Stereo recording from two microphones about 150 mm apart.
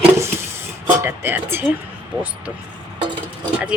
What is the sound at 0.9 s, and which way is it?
Speech, 15° right (ahead or behind).